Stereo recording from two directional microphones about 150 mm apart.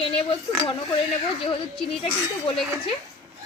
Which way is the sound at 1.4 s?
35° left (ahead or behind).